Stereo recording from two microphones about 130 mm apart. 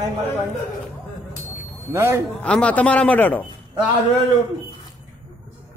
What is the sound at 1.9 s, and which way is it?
Speech, 20° right (ahead or behind).